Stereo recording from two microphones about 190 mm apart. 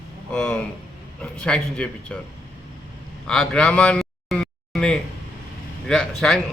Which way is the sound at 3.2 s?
5° left (ahead or behind).